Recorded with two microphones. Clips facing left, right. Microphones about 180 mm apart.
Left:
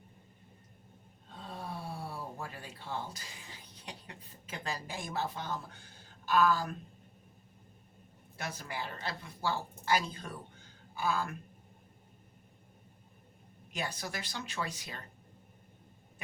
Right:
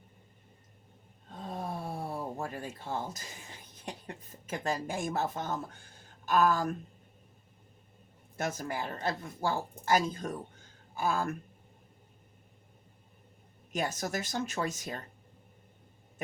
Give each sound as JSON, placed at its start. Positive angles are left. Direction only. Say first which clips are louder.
{"t": 1.4, "sound": "gasp", "louder": "right 5 dB", "side_deg": -45}
{"t": 3.8, "sound": "speech", "louder": "right 6 dB", "side_deg": -45}
{"t": 8.4, "sound": "speech", "louder": "right 6 dB", "side_deg": -45}
{"t": 13.7, "sound": "speech", "louder": "right 6 dB", "side_deg": -45}